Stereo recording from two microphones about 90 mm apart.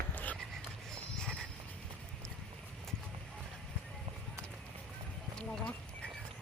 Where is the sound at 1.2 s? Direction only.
5° left (ahead or behind).